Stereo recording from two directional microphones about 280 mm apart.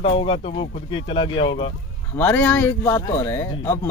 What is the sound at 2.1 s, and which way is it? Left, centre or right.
Speech, centre.